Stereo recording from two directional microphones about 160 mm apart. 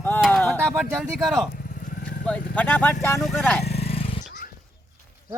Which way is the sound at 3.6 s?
40° left (ahead or behind).